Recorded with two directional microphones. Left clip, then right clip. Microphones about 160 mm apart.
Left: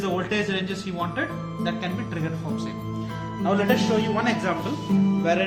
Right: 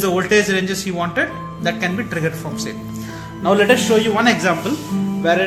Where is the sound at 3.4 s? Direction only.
50° right (ahead or behind).